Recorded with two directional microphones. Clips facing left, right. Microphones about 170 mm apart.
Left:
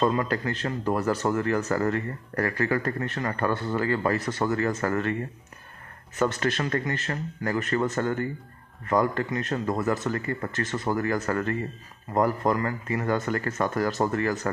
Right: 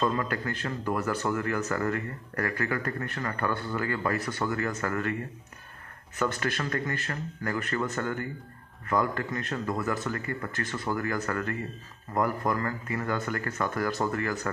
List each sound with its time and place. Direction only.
0.2 s a man's voice: 25° left (ahead or behind)
6.1 s a man's voice: 25° left (ahead or behind)